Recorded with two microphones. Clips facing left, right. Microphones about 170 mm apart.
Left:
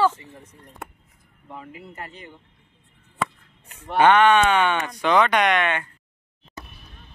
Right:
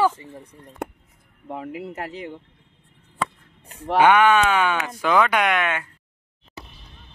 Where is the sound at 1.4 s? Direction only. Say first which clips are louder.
Right 8 dB; 65° right (ahead or behind); by 2.4 s 80° right.